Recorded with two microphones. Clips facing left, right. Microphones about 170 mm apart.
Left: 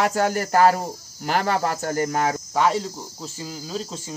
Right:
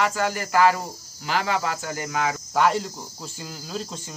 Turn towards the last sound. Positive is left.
turn(degrees=0)  # may be behind; listen again after turning